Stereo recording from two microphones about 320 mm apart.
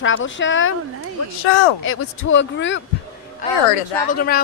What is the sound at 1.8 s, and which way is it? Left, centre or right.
A woman's voice, left.